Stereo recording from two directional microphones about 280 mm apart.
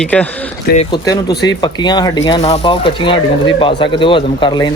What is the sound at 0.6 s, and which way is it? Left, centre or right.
Speech, left.